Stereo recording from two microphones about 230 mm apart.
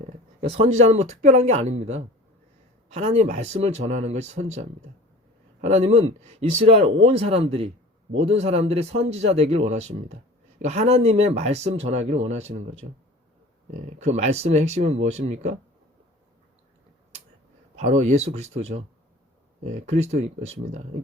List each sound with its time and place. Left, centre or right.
0.4 s speech: right
5.6 s speech: right
17.7 s speech: right